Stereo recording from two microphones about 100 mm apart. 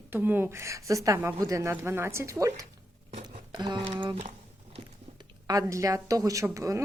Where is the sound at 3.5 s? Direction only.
45° right (ahead or behind).